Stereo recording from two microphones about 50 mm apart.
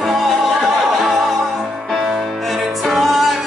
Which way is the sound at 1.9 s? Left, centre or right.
Centre.